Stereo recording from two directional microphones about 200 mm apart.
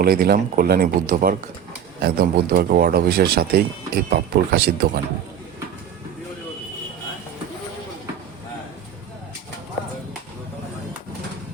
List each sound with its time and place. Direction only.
0.0 s speech: 50° right (ahead or behind)